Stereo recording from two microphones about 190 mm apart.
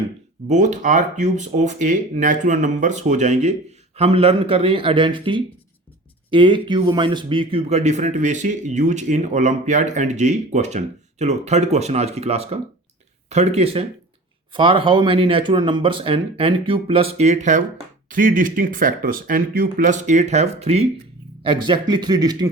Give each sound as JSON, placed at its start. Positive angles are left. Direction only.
{"t": 0.4, "sound": "speech", "side_deg": -40}